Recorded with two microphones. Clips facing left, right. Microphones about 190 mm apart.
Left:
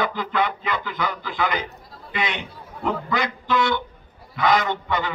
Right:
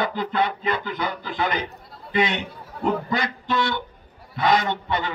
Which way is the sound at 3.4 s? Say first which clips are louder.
Left 4 dB; 30° right (ahead or behind).